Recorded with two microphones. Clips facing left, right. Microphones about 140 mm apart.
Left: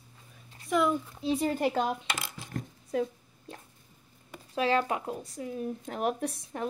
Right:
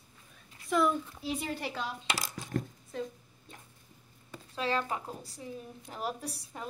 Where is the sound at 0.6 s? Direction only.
10° left (ahead or behind).